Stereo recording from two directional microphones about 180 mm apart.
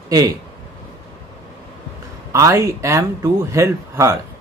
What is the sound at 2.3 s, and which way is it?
Speech, 15° right (ahead or behind).